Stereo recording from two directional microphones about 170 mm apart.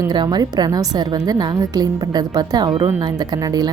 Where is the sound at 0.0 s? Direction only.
25° right (ahead or behind).